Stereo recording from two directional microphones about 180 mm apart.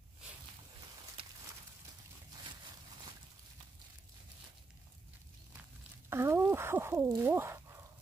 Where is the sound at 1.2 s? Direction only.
30° right (ahead or behind).